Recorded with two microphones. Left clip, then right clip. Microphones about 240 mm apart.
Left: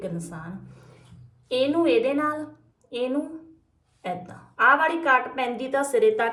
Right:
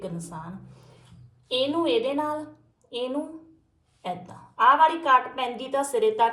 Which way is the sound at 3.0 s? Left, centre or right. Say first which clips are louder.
Left 3 dB; right.